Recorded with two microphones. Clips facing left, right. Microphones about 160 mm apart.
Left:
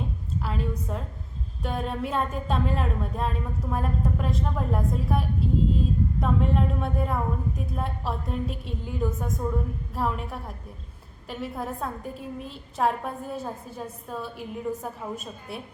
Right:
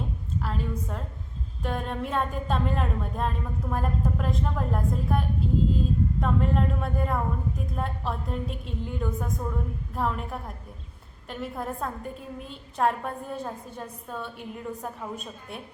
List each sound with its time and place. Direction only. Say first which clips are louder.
0.4 s a woman's voice: left 2 dB; centre (ahead or behind)